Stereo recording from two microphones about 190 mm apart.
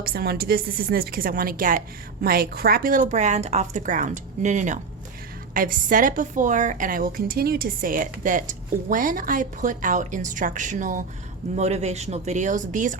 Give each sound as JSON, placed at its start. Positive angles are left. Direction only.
{"t": 0.0, "sound": "a woman's voice", "side_deg": -55}